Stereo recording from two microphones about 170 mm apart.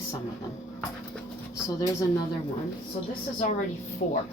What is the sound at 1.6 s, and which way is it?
Speech, 15° left (ahead or behind).